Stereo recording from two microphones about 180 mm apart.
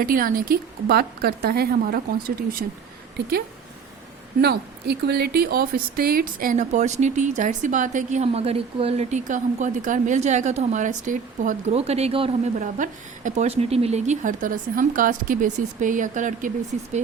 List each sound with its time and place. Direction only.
0.0 s speech: 50° right (ahead or behind); by 12.3 s 35° right (ahead or behind)
12.5 s speech: 45° right (ahead or behind)